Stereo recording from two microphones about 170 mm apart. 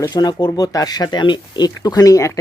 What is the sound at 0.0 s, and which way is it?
A man's voice, 25° left (ahead or behind).